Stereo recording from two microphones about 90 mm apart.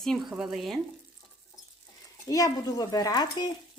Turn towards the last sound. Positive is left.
turn(degrees=50)  # may be behind; listen again after turning